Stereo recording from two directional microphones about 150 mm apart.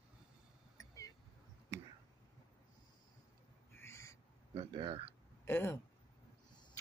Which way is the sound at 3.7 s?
15° left (ahead or behind).